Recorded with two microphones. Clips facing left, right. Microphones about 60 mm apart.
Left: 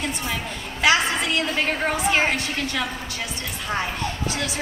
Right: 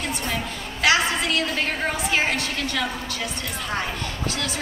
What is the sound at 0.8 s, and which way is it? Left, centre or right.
Speech, left.